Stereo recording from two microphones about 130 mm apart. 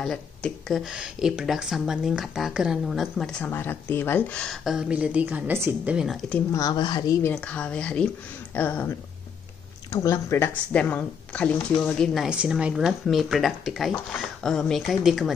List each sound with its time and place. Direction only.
0.0 s speech: 5° left (ahead or behind)
3.4 s speech: 15° left (ahead or behind)
4.6 s a woman's voice: 5° right (ahead or behind)
6.5 s a woman's voice: 30° left (ahead or behind)
7.2 s speech: 10° left (ahead or behind)